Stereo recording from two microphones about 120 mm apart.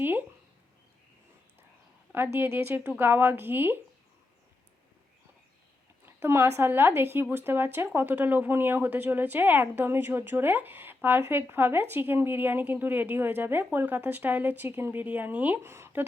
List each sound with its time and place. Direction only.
0.0 s speech: 15° right (ahead or behind)
2.1 s a woman's voice: 15° right (ahead or behind)
6.1 s a woman's voice: 20° right (ahead or behind)